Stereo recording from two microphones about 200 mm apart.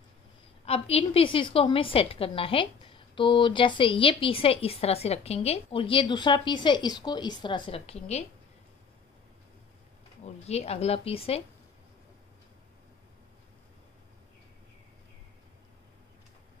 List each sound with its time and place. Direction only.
0.7 s a woman's voice: 30° left (ahead or behind)
10.2 s a woman's voice: 30° left (ahead or behind)